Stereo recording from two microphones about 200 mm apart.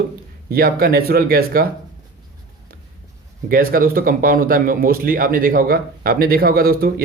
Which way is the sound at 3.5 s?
45° right (ahead or behind).